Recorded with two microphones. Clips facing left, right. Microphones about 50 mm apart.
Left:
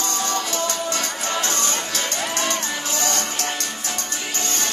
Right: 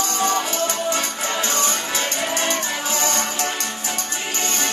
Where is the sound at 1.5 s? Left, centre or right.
Right.